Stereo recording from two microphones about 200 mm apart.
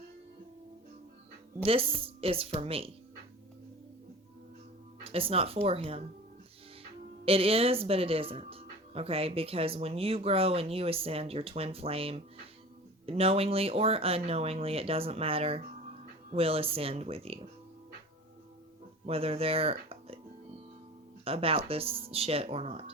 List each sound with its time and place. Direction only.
1.6 s speech: 30° right (ahead or behind)
5.0 s speech: 30° right (ahead or behind)
7.3 s speech: 30° right (ahead or behind)
19.0 s speech: 30° right (ahead or behind)
21.2 s speech: 30° right (ahead or behind)